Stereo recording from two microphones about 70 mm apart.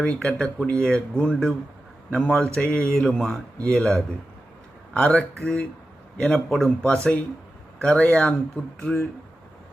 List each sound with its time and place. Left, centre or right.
0.0 s a man's voice: centre